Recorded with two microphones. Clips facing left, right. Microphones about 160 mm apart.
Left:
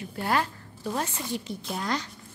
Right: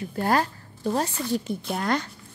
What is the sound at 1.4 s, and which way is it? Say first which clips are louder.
Speech: right 5 dB; 60° right (ahead or behind).